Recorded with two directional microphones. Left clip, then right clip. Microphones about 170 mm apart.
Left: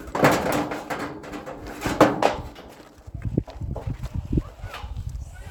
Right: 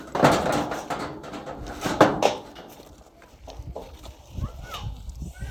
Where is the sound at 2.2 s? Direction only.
30° right (ahead or behind).